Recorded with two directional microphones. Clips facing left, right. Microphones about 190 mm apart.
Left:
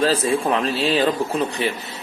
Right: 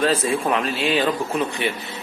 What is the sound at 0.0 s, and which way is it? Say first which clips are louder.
A man's voice: left 1 dB; 30° left (ahead or behind).